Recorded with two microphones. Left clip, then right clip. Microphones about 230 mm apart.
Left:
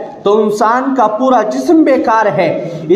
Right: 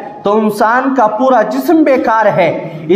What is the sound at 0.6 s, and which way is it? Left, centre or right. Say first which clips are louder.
A woman's voice: right 1 dB; right.